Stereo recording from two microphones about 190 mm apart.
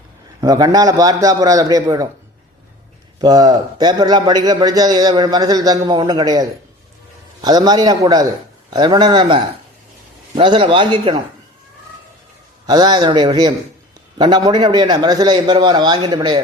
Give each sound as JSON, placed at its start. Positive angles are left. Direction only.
{"t": 0.4, "sound": "a man's voice", "side_deg": -20}
{"t": 3.2, "sound": "a man's voice", "side_deg": -20}
{"t": 12.6, "sound": "a man's voice", "side_deg": -20}